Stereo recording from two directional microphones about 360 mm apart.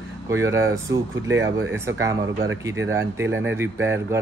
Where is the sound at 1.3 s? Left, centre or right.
Right.